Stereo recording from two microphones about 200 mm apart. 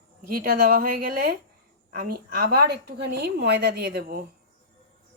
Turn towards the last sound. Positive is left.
turn(degrees=-45)  # may be behind; listen again after turning